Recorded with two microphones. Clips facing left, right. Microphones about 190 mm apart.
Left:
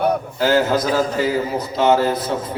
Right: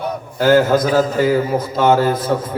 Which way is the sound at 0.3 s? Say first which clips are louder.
Right 7 dB; 50° right (ahead or behind).